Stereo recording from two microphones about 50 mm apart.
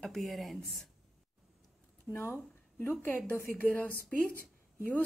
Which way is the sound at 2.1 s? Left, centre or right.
Centre.